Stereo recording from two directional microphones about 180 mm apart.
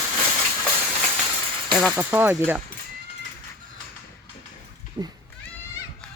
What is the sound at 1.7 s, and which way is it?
Speech, centre (ahead or behind).